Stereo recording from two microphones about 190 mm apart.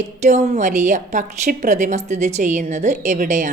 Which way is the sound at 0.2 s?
40° right (ahead or behind).